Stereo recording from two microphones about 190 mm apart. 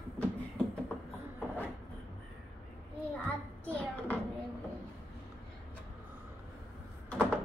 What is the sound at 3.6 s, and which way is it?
Hands, 5° left (ahead or behind).